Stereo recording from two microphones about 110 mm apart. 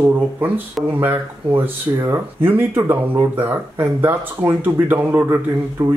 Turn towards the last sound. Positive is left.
turn(degrees=-25)  # may be behind; listen again after turning